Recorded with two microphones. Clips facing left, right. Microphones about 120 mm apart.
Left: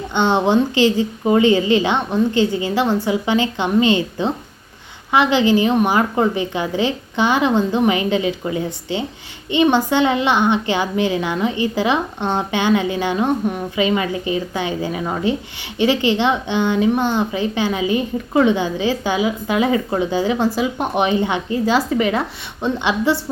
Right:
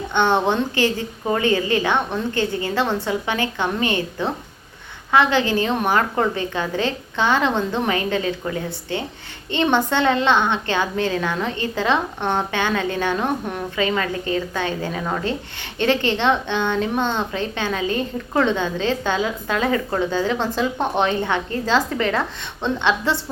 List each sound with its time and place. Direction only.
0.1 s a woman's voice: 15° left (ahead or behind)